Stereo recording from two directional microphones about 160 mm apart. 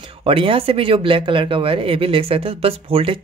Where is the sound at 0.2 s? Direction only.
35° right (ahead or behind).